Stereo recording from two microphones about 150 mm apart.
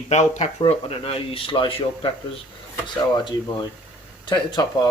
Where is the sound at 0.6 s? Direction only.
35° left (ahead or behind).